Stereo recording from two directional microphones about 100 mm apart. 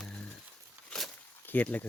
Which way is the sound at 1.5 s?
15° left (ahead or behind).